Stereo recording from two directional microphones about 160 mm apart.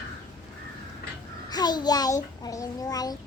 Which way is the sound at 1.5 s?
25° left (ahead or behind).